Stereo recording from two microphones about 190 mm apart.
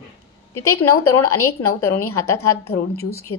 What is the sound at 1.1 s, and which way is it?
A woman's voice, 15° left (ahead or behind).